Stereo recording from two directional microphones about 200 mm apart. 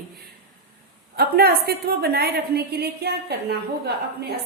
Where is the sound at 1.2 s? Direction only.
50° right (ahead or behind).